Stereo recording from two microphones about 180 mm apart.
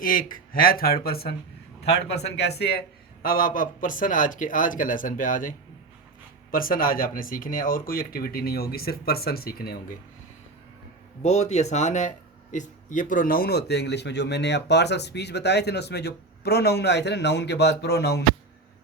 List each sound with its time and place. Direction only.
0.0 s a man's voice: 50° left (ahead or behind)
3.2 s speech: 50° left (ahead or behind)
11.2 s speech: 40° left (ahead or behind); by 18.2 s 65° left (ahead or behind)